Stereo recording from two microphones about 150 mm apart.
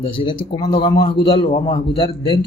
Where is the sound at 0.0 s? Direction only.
40° left (ahead or behind).